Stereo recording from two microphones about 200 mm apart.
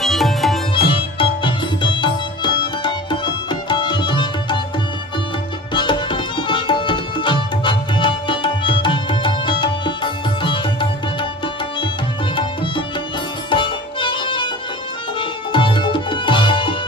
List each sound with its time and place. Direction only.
0.0 s music: centre (ahead or behind)
0.7 s music: 25° left (ahead or behind)
5.8 s tabla: 25° left (ahead or behind)
13.5 s music: 25° left (ahead or behind)